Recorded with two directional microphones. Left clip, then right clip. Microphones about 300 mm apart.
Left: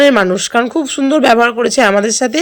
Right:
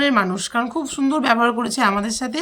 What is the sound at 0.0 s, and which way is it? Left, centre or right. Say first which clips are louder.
Speech: left 9 dB; centre.